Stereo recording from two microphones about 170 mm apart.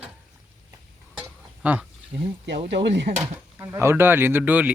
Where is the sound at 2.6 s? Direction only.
90° right.